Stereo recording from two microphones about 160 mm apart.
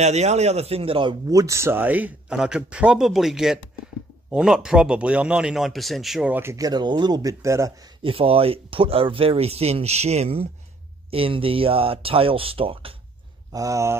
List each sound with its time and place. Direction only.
0.0 s a man's voice: 45° right (ahead or behind)
1.3 s speech: 20° right (ahead or behind); by 6.3 s centre (ahead or behind)
6.3 s speech: 15° right (ahead or behind)
8.0 s speech: 35° right (ahead or behind)
13.5 s speech: 20° right (ahead or behind)